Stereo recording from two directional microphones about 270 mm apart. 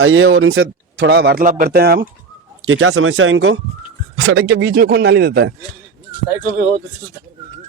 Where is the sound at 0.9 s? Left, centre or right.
Right.